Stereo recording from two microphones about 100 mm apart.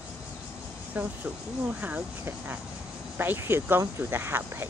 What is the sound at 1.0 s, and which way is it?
Speech, 15° right (ahead or behind).